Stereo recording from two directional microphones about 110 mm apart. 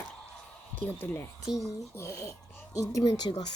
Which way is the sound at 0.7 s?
15° left (ahead or behind).